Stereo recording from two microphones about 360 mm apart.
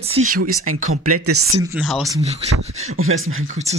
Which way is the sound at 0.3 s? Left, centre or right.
Right.